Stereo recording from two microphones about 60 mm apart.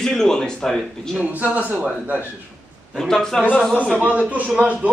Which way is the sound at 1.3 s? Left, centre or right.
Right.